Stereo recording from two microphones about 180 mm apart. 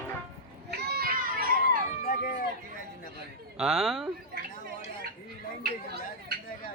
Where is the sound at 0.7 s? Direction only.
60° right (ahead or behind).